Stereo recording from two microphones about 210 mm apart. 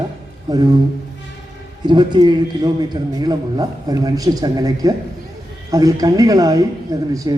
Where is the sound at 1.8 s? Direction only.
20° right (ahead or behind).